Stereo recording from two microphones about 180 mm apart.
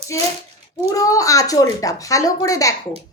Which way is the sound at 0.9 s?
20° left (ahead or behind).